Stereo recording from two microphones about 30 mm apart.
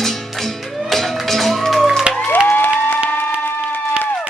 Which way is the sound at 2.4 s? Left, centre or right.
Left.